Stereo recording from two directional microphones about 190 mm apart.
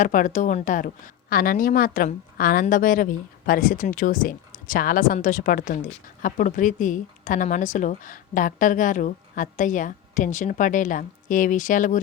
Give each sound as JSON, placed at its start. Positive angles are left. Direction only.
{"t": 0.0, "sound": "a woman's voice", "side_deg": 45}